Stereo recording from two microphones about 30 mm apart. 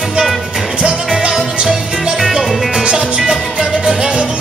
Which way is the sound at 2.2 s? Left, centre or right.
Centre.